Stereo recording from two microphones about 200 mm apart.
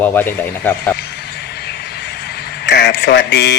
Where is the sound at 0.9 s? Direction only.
55° left (ahead or behind).